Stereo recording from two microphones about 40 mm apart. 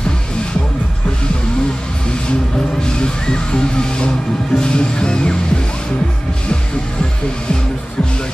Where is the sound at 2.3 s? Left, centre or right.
Left.